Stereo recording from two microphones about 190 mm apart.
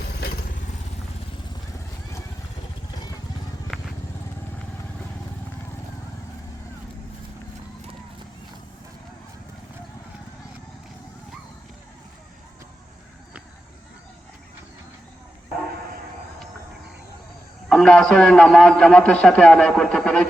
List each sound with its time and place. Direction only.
0.0 s vehicle: 60° left (ahead or behind)
17.7 s a man's voice: 5° left (ahead or behind)